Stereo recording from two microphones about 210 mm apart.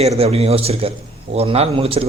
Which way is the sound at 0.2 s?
30° right (ahead or behind).